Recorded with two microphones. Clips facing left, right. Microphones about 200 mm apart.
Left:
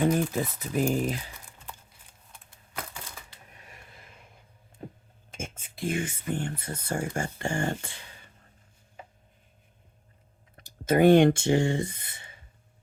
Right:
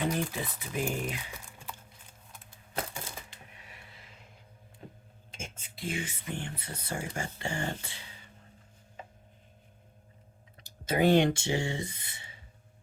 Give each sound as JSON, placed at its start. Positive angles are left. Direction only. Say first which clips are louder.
{"t": 0.0, "sound": "speech", "louder": "left 7 dB", "side_deg": 45}
{"t": 3.6, "sound": "a sound", "louder": "left 2 dB", "side_deg": 45}
{"t": 5.3, "sound": "speech", "louder": "left 6 dB", "side_deg": 50}
{"t": 10.6, "sound": "speech", "louder": "left 6 dB", "side_deg": 50}